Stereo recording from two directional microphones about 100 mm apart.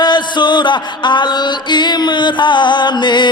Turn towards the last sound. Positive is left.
turn(degrees=50)  # may be behind; listen again after turning